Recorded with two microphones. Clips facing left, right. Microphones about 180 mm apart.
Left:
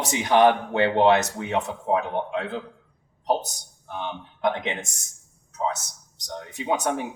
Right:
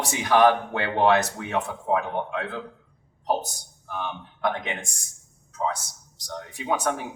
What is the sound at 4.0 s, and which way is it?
Speech, 20° left (ahead or behind).